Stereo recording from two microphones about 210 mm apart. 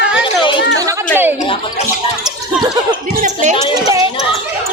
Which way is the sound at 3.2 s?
35° right (ahead or behind).